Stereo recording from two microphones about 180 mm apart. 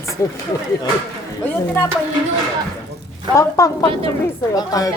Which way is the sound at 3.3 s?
20° left (ahead or behind).